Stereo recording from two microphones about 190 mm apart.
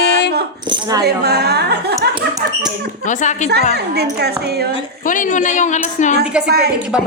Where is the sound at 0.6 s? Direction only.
20° right (ahead or behind).